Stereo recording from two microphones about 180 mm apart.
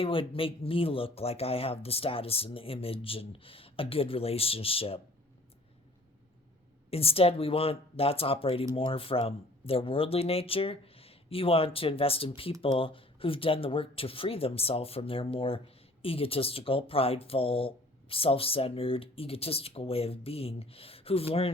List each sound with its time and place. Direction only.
0.0 s speech: 30° left (ahead or behind)
6.9 s speech: 30° left (ahead or behind)